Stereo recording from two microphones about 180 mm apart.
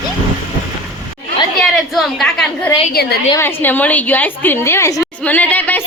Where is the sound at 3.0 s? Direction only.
65° left (ahead or behind).